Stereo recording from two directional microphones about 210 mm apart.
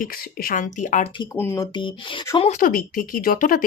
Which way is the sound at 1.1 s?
15° left (ahead or behind).